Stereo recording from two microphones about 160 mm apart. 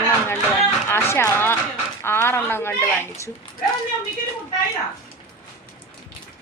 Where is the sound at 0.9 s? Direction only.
15° left (ahead or behind).